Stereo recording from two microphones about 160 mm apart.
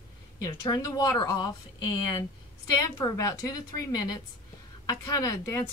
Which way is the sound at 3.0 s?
20° left (ahead or behind).